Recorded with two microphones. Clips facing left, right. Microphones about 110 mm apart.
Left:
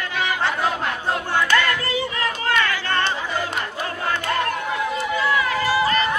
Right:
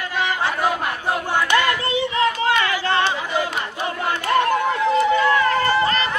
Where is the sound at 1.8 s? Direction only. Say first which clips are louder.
Right 4 dB; 20° right (ahead or behind).